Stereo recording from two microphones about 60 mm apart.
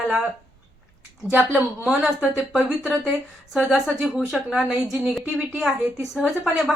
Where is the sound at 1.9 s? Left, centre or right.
Centre.